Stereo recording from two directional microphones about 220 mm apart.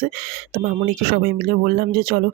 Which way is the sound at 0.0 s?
45° right (ahead or behind).